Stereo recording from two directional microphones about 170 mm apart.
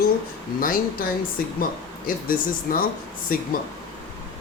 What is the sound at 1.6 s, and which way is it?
A woman's voice, 55° left (ahead or behind).